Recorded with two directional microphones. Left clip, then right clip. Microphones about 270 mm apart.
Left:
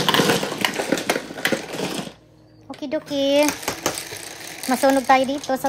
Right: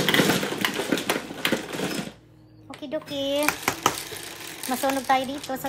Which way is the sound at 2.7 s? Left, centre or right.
Left.